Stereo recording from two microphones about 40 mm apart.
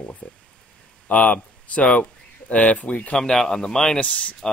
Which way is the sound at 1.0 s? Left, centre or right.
Left.